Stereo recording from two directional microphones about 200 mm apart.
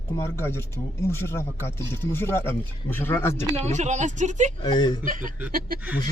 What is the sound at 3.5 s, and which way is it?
Speech, 35° right (ahead or behind).